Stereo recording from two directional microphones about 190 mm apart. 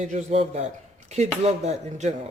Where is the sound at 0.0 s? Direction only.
35° right (ahead or behind).